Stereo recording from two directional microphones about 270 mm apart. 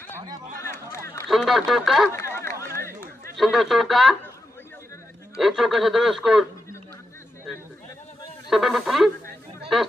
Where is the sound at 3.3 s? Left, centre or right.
Centre.